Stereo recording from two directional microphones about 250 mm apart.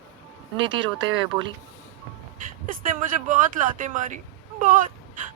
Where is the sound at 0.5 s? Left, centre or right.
Centre.